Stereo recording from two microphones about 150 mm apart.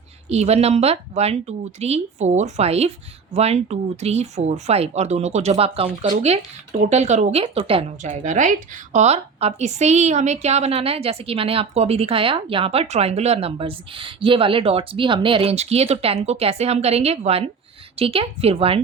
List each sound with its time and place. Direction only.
0.3 s a woman's voice: 45° right (ahead or behind)